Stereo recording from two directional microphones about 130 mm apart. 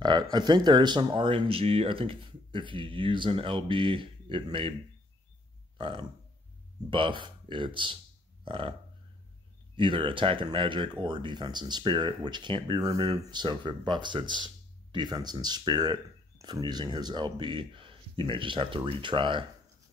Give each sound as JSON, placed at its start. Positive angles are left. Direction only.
{"t": 0.0, "sound": "speech", "side_deg": -35}
{"t": 5.8, "sound": "speech", "side_deg": -40}
{"t": 9.8, "sound": "speech", "side_deg": -40}